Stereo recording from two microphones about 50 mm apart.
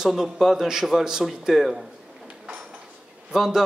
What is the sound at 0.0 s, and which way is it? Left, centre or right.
A man's voice, centre.